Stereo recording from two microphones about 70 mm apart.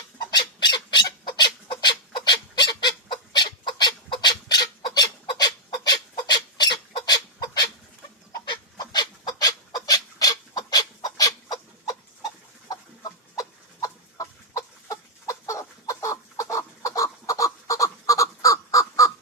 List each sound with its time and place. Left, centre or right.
0.3 s bird: left
8.4 s fowl: left
12.6 s chicken: left
13.8 s chicken: left